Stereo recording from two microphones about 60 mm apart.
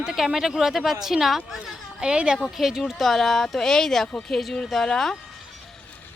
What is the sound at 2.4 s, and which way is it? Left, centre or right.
Speech, centre.